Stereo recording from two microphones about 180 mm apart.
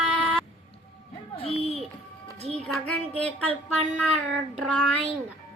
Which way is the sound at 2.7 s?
10° left (ahead or behind).